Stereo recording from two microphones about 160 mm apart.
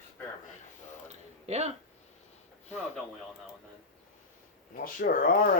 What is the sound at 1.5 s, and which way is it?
Speech, 40° right (ahead or behind).